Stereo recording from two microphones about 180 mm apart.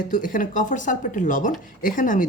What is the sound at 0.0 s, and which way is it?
A woman's voice, 45° left (ahead or behind).